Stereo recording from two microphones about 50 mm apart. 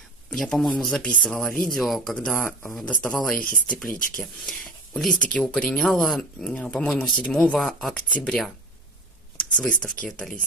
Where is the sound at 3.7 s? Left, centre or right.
Centre.